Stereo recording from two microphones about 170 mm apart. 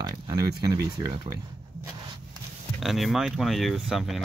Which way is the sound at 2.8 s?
Centre (ahead or behind).